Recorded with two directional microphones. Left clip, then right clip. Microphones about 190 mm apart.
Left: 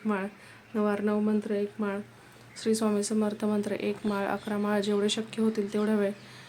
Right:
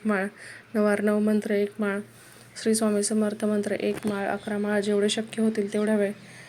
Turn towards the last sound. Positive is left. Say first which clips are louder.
# right 3 dB
turn(degrees=0)  # may be behind; listen again after turning